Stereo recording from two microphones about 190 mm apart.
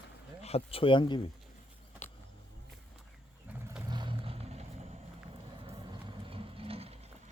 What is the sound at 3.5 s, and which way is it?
Vehicle, 10° right (ahead or behind).